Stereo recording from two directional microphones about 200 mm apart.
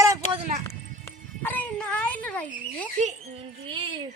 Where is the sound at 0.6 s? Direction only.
10° left (ahead or behind).